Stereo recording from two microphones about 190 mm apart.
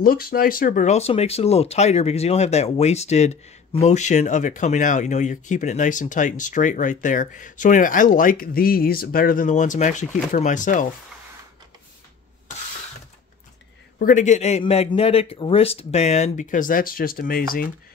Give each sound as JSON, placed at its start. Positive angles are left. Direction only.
{"t": 0.0, "sound": "speech", "side_deg": 50}
{"t": 13.9, "sound": "speech", "side_deg": 45}